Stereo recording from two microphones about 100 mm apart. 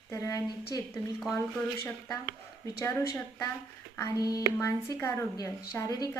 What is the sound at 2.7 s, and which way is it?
A woman's voice, 30° left (ahead or behind).